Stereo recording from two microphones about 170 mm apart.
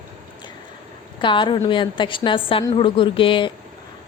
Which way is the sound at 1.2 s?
30° left (ahead or behind).